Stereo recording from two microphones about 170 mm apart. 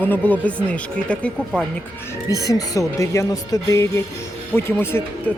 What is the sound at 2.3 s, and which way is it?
A woman's voice, 20° left (ahead or behind).